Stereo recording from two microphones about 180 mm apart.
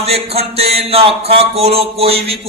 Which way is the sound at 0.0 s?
35° right (ahead or behind).